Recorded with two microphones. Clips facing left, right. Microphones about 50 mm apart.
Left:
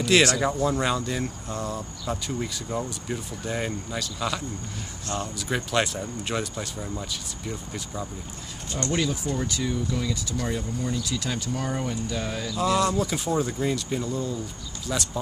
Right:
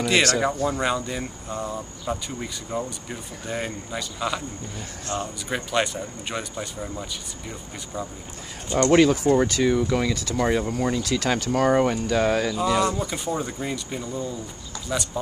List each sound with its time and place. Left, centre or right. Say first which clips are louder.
0.7 s speech: even; centre
5.1 s speech: right 2 dB; right
5.5 s speech: right 1 dB; centre
8.8 s speech: right 10 dB; right
12.5 s speech: right 1 dB; centre